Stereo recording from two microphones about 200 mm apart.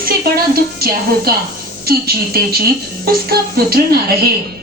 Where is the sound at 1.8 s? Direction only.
50° right (ahead or behind).